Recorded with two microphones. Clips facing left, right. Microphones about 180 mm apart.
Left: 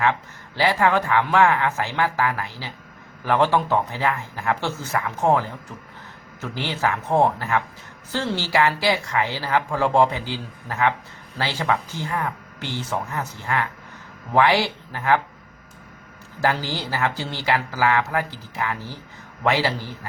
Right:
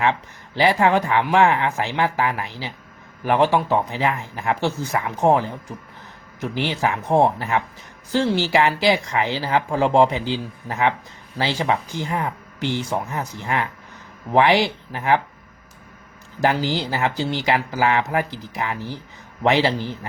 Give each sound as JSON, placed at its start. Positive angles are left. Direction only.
{"t": 0.0, "sound": "speech", "side_deg": -20}
{"t": 16.4, "sound": "speech", "side_deg": -15}